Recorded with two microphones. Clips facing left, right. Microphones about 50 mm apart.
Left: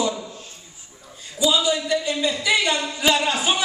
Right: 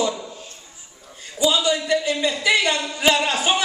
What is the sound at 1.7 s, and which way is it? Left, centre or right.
Speech, right.